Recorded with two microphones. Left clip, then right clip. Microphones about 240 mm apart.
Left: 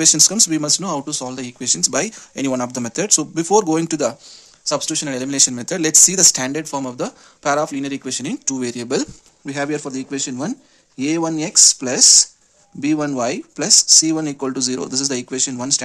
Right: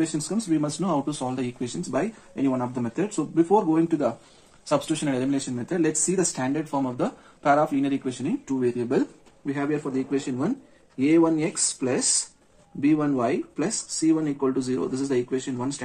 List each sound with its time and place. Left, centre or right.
0.0 s speech: left
1.9 s speech: left
4.6 s speech: left
5.6 s speech: left
8.5 s speech: left